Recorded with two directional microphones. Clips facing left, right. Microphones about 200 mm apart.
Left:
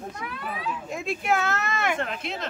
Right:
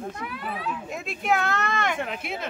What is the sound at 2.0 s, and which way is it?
Speech, 5° right (ahead or behind).